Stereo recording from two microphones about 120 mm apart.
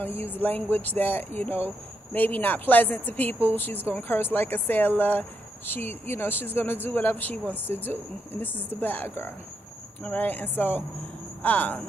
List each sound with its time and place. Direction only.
0.3 s speech: 15° left (ahead or behind)